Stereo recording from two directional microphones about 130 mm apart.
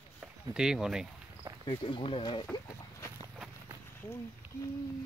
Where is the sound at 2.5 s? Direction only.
30° left (ahead or behind).